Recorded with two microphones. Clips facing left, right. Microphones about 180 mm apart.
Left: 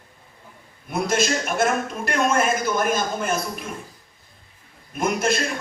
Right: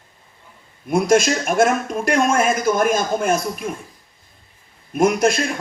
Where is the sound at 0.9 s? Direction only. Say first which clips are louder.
Right 6 dB; 50° right (ahead or behind).